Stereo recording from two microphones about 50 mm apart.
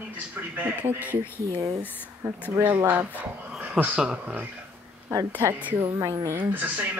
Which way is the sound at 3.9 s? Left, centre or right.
Right.